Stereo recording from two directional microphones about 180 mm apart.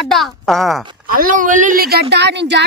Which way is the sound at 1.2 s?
45° right (ahead or behind).